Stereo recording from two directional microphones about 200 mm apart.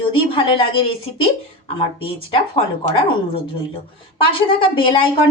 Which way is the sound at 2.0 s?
25° left (ahead or behind).